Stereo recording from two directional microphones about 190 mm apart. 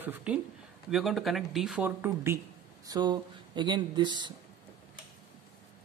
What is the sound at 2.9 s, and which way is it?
Speech, 20° right (ahead or behind).